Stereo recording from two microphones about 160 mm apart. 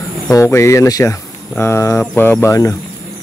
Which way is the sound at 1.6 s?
15° left (ahead or behind).